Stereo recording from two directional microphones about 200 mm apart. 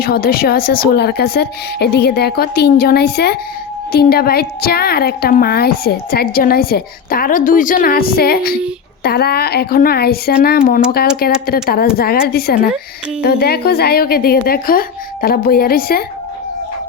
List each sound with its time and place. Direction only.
0.0 s a woman's voice: 50° left (ahead or behind)